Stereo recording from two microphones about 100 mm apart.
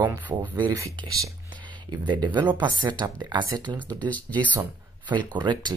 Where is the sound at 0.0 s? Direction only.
15° right (ahead or behind).